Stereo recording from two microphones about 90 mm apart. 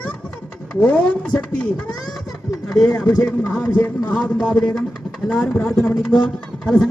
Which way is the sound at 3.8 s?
15° left (ahead or behind).